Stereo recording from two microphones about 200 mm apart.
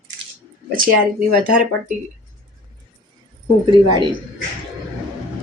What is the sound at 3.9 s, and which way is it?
Speech, 20° right (ahead or behind).